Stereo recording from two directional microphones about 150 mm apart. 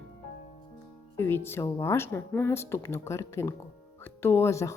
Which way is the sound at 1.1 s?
15° left (ahead or behind).